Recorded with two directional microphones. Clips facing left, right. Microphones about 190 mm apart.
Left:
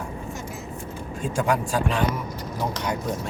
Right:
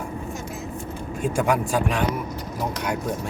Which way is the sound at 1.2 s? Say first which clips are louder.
Right 2 dB; 10° right (ahead or behind).